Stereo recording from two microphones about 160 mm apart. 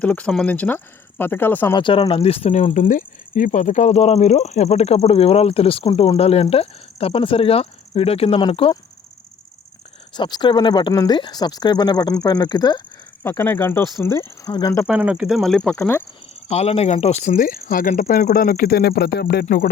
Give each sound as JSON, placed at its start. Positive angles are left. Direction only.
{"t": 0.0, "sound": "speech", "side_deg": 10}
{"t": 1.7, "sound": "speech", "side_deg": 30}
{"t": 10.2, "sound": "speech", "side_deg": 25}
{"t": 13.2, "sound": "speech", "side_deg": 15}
{"t": 14.8, "sound": "speech", "side_deg": -5}
{"t": 16.3, "sound": "speech", "side_deg": 40}